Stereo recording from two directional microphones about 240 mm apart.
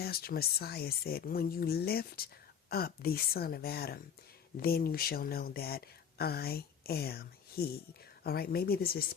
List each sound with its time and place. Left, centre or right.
0.0 s speech: left